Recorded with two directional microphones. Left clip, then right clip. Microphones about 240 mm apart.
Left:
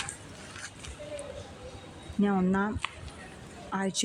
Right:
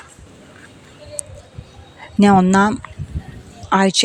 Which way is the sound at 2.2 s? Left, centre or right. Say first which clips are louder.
Right 16 dB; right.